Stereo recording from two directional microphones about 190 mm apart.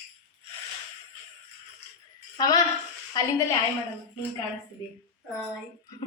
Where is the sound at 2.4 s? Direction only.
20° left (ahead or behind).